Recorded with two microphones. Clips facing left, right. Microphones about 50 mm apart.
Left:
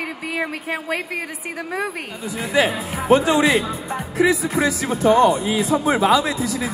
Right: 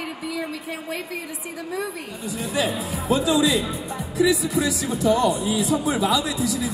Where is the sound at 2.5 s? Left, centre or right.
Left.